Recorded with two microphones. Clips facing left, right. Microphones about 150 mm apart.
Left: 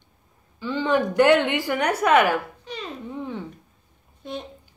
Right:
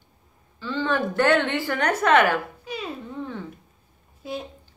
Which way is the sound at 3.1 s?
15° left (ahead or behind).